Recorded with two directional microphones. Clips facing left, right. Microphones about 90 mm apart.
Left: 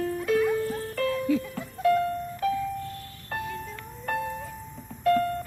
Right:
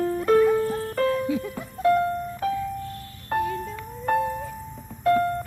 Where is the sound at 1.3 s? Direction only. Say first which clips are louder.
Left 1 dB; 20° right (ahead or behind).